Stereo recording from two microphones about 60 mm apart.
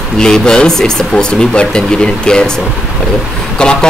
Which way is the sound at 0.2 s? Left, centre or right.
Centre.